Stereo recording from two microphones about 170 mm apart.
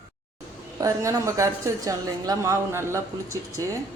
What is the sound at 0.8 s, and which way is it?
A woman's voice, 20° right (ahead or behind).